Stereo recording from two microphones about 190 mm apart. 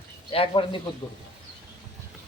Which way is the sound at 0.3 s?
30° left (ahead or behind).